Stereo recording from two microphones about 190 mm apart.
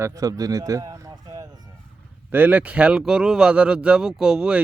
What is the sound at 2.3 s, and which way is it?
Speech, 10° right (ahead or behind).